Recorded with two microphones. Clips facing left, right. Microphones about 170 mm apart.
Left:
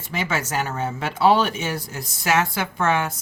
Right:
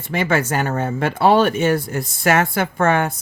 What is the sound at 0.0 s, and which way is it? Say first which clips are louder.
Speech: right 7 dB; 55° right (ahead or behind).